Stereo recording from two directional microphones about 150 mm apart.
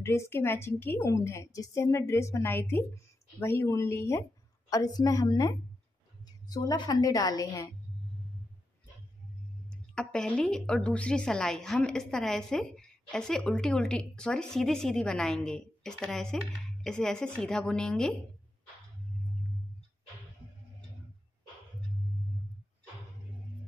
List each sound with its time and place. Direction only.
0.0 s a woman's voice: 20° left (ahead or behind)
6.5 s a woman's voice: 25° left (ahead or behind)
9.7 s a woman's voice: 5° left (ahead or behind)